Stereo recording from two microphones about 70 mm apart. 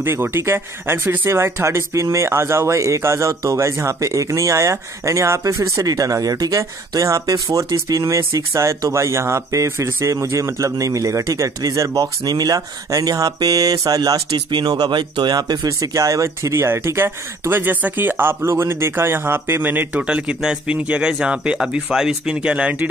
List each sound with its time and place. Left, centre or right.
0.0 s speech: right
7.7 s speech: right
16.6 s speech: right
20.0 s speech: centre